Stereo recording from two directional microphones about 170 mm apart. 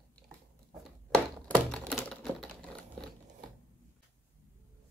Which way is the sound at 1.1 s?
5° left (ahead or behind).